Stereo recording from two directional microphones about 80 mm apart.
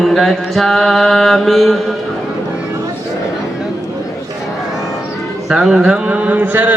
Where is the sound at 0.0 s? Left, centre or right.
Centre.